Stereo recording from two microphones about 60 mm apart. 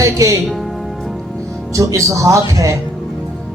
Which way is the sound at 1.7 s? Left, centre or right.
Right.